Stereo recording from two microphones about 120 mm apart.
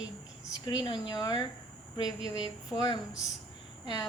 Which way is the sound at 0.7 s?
40° left (ahead or behind).